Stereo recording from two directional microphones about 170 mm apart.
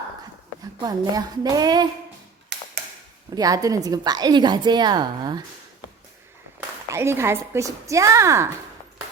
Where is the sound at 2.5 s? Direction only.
90° right.